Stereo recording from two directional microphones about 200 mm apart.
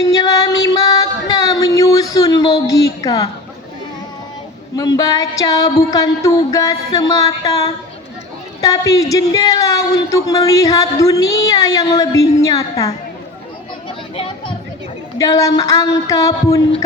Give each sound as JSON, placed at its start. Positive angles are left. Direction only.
{"t": 0.0, "sound": "music", "side_deg": 20}
{"t": 4.8, "sound": "speech", "side_deg": 20}
{"t": 14.2, "sound": "a sound", "side_deg": 25}
{"t": 15.2, "sound": "speech", "side_deg": 15}